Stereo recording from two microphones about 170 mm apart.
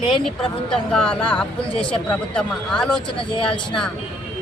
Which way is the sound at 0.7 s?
5° left (ahead or behind).